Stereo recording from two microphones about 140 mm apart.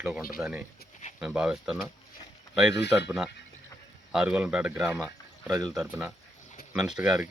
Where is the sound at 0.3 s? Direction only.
10° right (ahead or behind).